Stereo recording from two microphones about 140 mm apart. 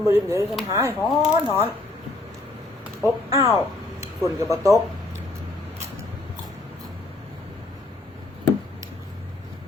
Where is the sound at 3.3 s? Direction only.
25° right (ahead or behind).